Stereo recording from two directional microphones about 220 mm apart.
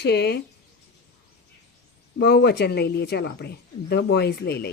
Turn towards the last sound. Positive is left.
turn(degrees=45)  # may be behind; listen again after turning